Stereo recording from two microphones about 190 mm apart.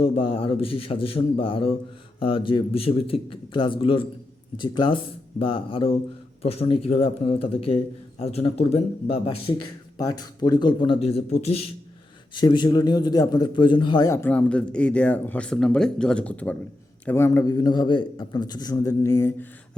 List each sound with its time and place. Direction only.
0.0 s a man's voice: 30° left (ahead or behind); by 19.5 s 15° left (ahead or behind)